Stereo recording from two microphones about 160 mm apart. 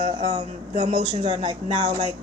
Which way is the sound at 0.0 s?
30° right (ahead or behind).